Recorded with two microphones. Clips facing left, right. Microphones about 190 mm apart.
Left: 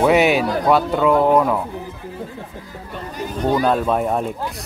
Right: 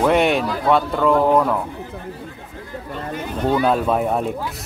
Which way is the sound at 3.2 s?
40° left (ahead or behind).